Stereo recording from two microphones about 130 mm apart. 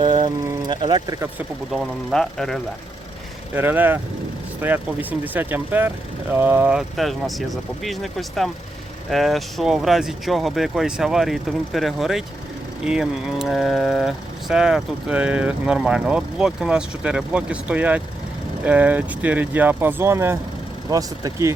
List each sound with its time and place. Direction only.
0.7 s speech: 35° right (ahead or behind)
1.7 s speech: centre (ahead or behind)
3.5 s speech: 15° right (ahead or behind)
6.7 s speech: centre (ahead or behind); by 21.5 s 25° right (ahead or behind)